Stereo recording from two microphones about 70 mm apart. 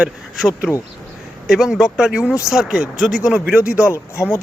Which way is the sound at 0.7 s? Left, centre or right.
Centre.